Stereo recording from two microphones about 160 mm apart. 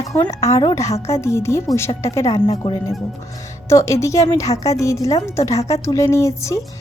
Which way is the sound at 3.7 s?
20° left (ahead or behind).